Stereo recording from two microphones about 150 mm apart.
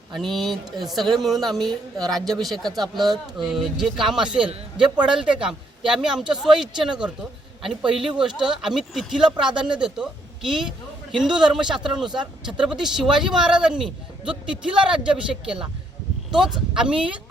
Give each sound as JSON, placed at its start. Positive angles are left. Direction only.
{"t": 0.1, "sound": "speech", "side_deg": 0}
{"t": 12.2, "sound": "speech", "side_deg": -30}
{"t": 12.6, "sound": "speech", "side_deg": -5}